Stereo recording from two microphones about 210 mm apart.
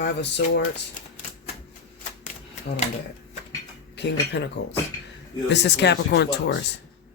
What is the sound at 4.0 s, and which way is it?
Speech, 55° left (ahead or behind).